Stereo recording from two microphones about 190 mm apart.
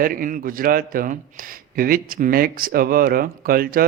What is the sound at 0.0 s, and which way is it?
A man's voice, 50° right (ahead or behind).